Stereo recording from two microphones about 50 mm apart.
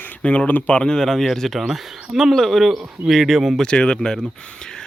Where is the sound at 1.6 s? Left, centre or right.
Centre.